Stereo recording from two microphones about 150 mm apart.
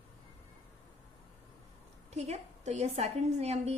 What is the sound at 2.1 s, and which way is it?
A woman's voice, 45° right (ahead or behind).